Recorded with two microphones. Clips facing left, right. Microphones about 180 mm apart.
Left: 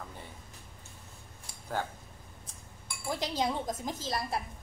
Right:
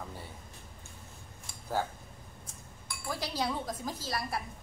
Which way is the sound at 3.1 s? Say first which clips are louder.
Left 2 dB; 20° left (ahead or behind).